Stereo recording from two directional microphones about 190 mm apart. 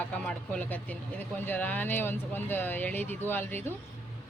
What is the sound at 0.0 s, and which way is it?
A woman's voice, 5° left (ahead or behind).